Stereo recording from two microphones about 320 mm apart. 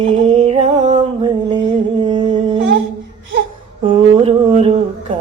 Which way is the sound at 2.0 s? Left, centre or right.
Centre.